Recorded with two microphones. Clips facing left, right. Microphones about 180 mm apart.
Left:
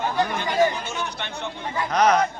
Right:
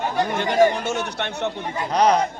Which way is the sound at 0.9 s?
70° right (ahead or behind).